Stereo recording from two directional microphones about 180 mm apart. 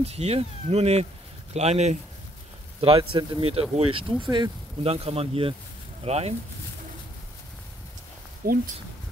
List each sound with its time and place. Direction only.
0.0 s speech: 35° right (ahead or behind)
2.8 s speech: 25° right (ahead or behind)
8.4 s speech: 55° right (ahead or behind)